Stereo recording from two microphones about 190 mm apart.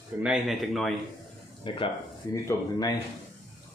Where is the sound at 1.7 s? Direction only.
25° left (ahead or behind).